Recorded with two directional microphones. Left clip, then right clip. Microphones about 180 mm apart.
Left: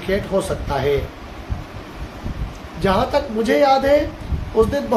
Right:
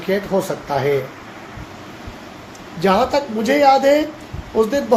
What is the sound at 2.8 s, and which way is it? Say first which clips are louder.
A woman's voice: right 2 dB; 35° right (ahead or behind).